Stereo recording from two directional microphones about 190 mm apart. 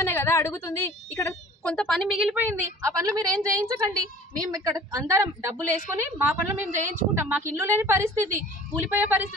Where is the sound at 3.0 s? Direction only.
20° right (ahead or behind).